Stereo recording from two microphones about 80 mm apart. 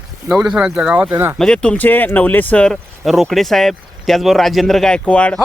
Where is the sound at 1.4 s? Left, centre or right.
Centre.